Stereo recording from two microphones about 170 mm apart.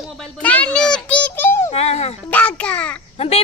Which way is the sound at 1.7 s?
40° left (ahead or behind).